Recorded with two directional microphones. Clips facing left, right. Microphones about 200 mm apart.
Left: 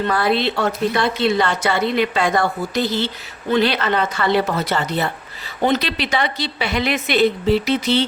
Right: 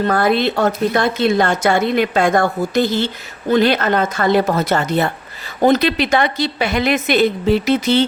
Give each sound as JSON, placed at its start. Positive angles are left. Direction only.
{"t": 0.0, "sound": "a woman's voice", "side_deg": -45}